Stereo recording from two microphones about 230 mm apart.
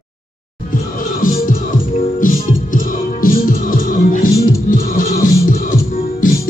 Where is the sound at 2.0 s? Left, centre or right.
Left.